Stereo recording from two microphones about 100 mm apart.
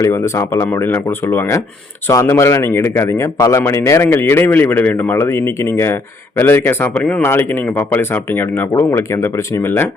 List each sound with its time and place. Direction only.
0.0 s a man's voice: 30° left (ahead or behind)